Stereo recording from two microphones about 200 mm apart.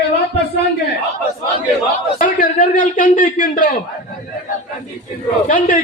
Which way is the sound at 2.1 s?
45° left (ahead or behind).